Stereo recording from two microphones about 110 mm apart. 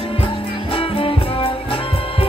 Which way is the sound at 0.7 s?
55° left (ahead or behind).